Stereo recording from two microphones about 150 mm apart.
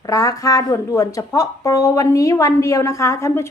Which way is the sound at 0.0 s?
25° left (ahead or behind).